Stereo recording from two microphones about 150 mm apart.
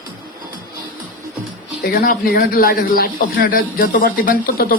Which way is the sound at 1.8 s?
85° left.